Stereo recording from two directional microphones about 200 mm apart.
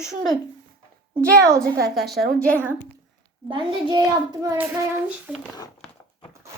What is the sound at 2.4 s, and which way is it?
Speech, 5° left (ahead or behind).